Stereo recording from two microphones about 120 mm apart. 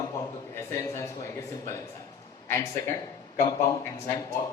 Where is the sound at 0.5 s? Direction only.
25° left (ahead or behind).